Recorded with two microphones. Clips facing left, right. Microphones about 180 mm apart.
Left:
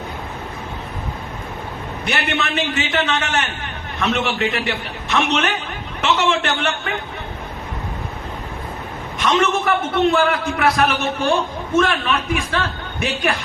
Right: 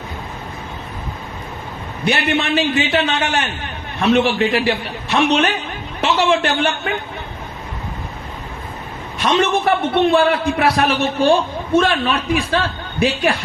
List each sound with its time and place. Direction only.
2.0 s a man's voice: 30° right (ahead or behind)
9.1 s a man's voice: 35° right (ahead or behind)